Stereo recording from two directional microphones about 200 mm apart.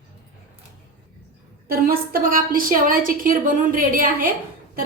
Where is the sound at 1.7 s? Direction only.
50° right (ahead or behind).